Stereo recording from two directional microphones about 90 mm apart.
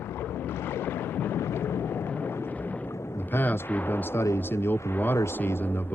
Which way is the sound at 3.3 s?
20° left (ahead or behind).